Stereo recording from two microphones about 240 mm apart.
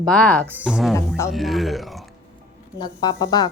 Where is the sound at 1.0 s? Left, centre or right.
Centre.